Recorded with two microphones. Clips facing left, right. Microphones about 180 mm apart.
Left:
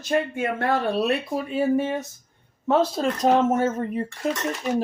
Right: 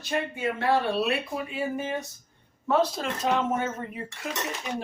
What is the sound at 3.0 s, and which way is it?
Speech, 45° left (ahead or behind).